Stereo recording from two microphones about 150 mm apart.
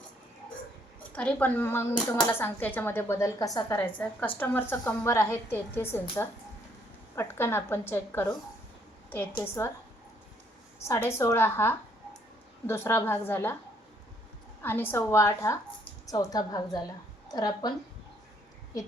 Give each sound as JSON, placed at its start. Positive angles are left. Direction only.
{"t": 1.1, "sound": "speech", "side_deg": 10}
{"t": 9.4, "sound": "speech", "side_deg": 20}
{"t": 10.8, "sound": "speech", "side_deg": 20}
{"t": 14.6, "sound": "a woman's voice", "side_deg": 15}